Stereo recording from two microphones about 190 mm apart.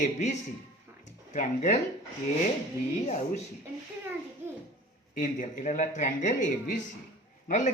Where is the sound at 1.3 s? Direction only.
40° left (ahead or behind).